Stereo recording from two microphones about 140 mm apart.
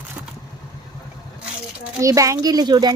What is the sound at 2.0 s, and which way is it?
Speech, 25° right (ahead or behind).